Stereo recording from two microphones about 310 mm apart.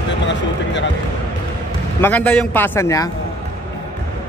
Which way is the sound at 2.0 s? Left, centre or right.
Centre.